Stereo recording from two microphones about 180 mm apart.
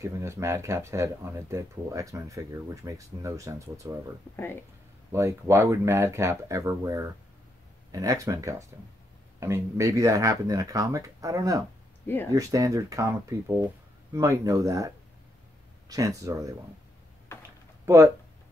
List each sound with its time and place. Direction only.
0.0 s speech: 15° right (ahead or behind)
5.1 s speech: 15° right (ahead or behind)
15.9 s speech: 20° right (ahead or behind)
17.8 s speech: 15° right (ahead or behind)